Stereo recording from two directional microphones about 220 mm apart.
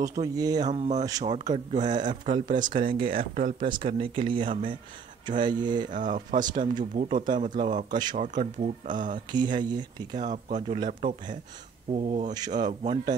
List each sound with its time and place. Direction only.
0.2 s speech: 15° right (ahead or behind)
0.7 s speech: 30° right (ahead or behind)
2.9 s speech: 25° right (ahead or behind)
3.2 s speech: 35° right (ahead or behind)
3.8 s speech: 25° right (ahead or behind)
5.9 s speech: 35° right (ahead or behind)
9.3 s speech: 20° right (ahead or behind)
10.1 s speech: 35° right (ahead or behind)